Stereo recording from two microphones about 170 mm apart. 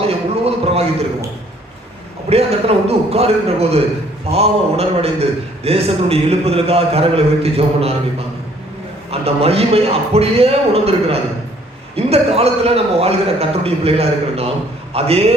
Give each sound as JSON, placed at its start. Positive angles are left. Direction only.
{"t": 0.4, "sound": "a sound", "side_deg": -35}
{"t": 2.3, "sound": "a man's voice", "side_deg": -35}
{"t": 9.0, "sound": "a man's voice", "side_deg": -35}